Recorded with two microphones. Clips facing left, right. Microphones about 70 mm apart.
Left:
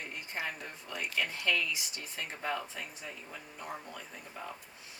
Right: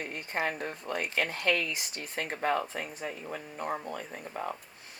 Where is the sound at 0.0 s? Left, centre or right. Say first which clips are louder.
Right 6 dB; right.